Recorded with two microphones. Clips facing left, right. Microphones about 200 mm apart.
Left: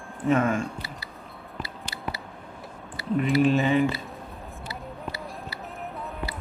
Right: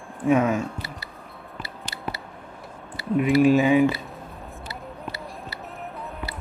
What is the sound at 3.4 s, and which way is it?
Speech, 5° right (ahead or behind).